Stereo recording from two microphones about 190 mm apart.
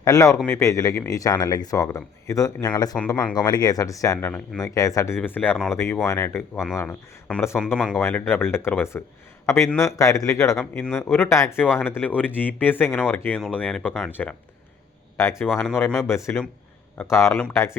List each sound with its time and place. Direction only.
0.0 s speech: 15° left (ahead or behind)
15.2 s speech: 15° left (ahead or behind)